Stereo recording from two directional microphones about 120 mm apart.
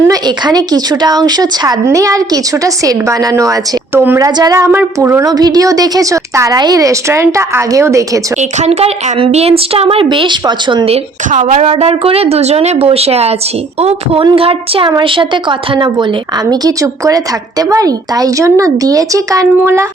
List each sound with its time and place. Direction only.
0.1 s speech: 35° right (ahead or behind); by 4.3 s 20° right (ahead or behind)
4.4 s speech: 30° right (ahead or behind)
5.2 s speech: 35° right (ahead or behind)
8.4 s speech: 70° right (ahead or behind); by 10.8 s 40° right (ahead or behind)
10.8 s a woman's voice: 75° right (ahead or behind); by 11.6 s 90° right
11.6 s speech: 55° right (ahead or behind)
16.5 s speech: 30° right (ahead or behind)